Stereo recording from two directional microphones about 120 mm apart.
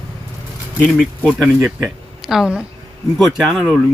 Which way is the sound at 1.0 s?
Centre (ahead or behind).